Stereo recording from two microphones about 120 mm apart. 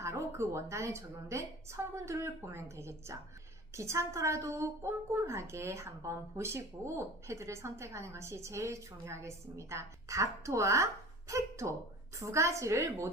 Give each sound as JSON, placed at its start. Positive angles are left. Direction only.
{"t": 0.0, "sound": "a woman's voice", "side_deg": -25}